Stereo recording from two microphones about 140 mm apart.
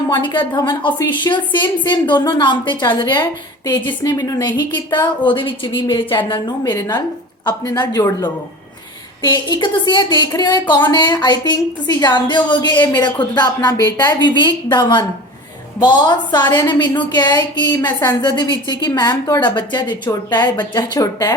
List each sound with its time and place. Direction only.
0.1 s speech: 35° left (ahead or behind)